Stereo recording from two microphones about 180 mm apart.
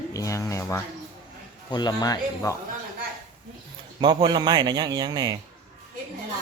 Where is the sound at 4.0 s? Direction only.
25° right (ahead or behind).